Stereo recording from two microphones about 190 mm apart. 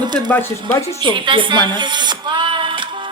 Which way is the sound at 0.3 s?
10° left (ahead or behind).